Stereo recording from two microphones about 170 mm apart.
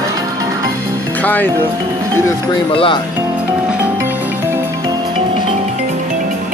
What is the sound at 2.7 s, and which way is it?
Speech, 30° left (ahead or behind).